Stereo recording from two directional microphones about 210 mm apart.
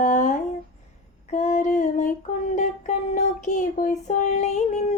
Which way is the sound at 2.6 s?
35° left (ahead or behind).